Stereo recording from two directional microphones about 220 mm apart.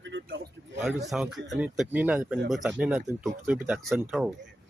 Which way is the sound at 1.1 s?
Centre (ahead or behind).